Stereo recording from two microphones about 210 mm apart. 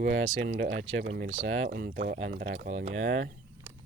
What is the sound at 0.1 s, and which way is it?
Speech, 50° right (ahead or behind).